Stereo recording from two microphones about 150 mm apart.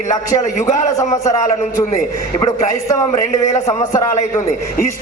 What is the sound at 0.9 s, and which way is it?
A man's voice, 20° left (ahead or behind).